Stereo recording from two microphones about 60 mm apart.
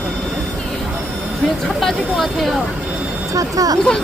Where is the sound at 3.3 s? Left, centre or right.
Right.